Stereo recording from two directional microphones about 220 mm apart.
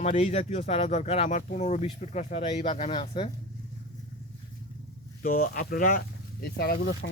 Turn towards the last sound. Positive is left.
turn(degrees=50)  # may be behind; listen again after turning